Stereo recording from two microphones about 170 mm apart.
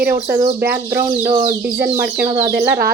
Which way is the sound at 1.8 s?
60° right (ahead or behind).